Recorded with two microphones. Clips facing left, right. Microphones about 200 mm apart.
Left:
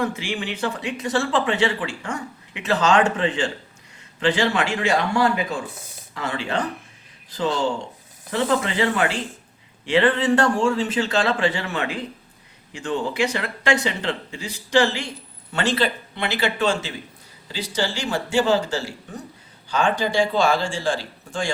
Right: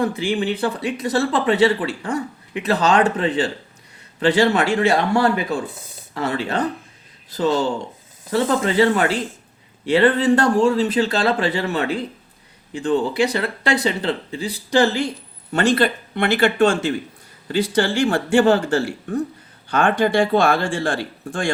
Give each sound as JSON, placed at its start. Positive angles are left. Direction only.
{"t": 0.0, "sound": "speech", "side_deg": -35}
{"t": 15.5, "sound": "speech", "side_deg": -55}